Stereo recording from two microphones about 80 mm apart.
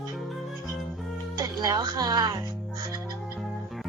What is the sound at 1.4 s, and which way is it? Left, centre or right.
Speech, right.